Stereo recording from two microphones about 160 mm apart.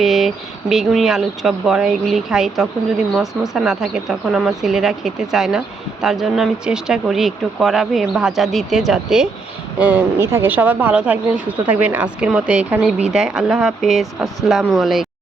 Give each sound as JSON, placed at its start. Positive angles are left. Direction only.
{"t": 0.0, "sound": "speech", "side_deg": 0}